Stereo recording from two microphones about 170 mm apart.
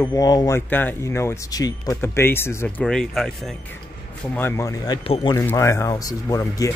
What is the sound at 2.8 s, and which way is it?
Speech, 5° left (ahead or behind).